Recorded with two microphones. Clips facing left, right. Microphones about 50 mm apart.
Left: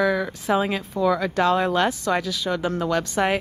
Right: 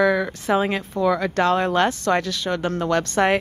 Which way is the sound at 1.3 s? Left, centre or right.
Right.